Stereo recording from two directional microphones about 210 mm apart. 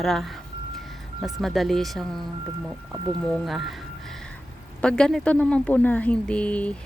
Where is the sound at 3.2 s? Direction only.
Centre (ahead or behind).